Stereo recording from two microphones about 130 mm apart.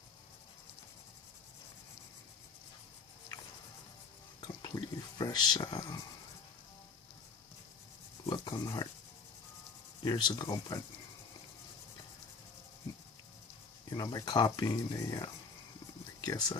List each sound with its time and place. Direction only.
4.4 s a sound: 30° left (ahead or behind)
8.3 s speech: 30° left (ahead or behind)
10.0 s speech: 35° left (ahead or behind)
13.9 s speech: 30° left (ahead or behind)